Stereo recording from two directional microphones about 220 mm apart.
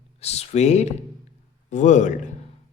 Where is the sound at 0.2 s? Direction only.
30° left (ahead or behind).